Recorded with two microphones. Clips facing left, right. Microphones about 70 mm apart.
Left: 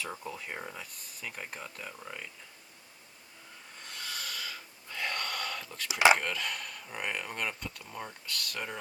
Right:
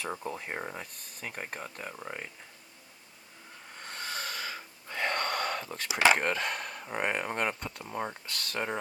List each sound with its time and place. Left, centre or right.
0.3 s speech: right
3.8 s snort: right
6.1 s speech: right